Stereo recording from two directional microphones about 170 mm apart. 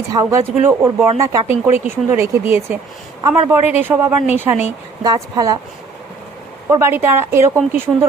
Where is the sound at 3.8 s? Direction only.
15° right (ahead or behind).